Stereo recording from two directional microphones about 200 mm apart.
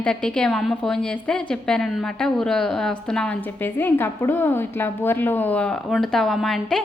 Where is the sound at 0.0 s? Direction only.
5° left (ahead or behind).